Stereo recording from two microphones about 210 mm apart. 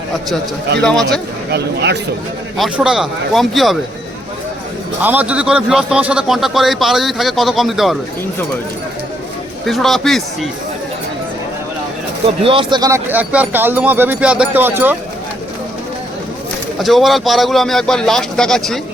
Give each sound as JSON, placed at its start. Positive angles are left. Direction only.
{"t": 0.8, "sound": "a man's voice", "side_deg": 5}
{"t": 1.5, "sound": "speech", "side_deg": -50}
{"t": 2.6, "sound": "a man's voice", "side_deg": -5}
{"t": 5.0, "sound": "a man's voice", "side_deg": -5}
{"t": 9.6, "sound": "a man's voice", "side_deg": 0}
{"t": 12.4, "sound": "speech", "side_deg": -25}
{"t": 16.8, "sound": "a man's voice", "side_deg": 0}